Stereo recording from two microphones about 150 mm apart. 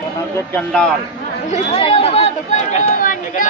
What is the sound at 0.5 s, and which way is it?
Speech, 10° left (ahead or behind).